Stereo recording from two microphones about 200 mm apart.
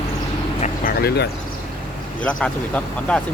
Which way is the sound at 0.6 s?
45° left (ahead or behind).